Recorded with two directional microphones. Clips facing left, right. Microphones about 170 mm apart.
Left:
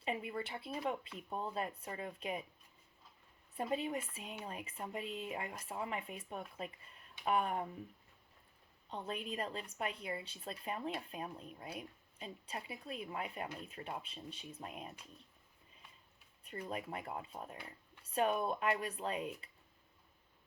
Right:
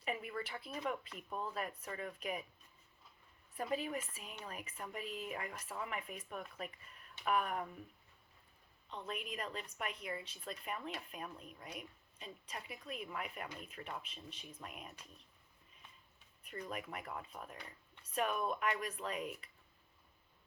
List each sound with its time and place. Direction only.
0.0 s speech: 25° left (ahead or behind)
3.6 s speech: 25° left (ahead or behind)
8.9 s speech: 30° left (ahead or behind)
16.4 s speech: 30° left (ahead or behind)